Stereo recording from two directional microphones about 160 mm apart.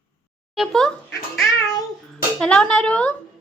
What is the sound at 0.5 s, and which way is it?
Speech, centre (ahead or behind).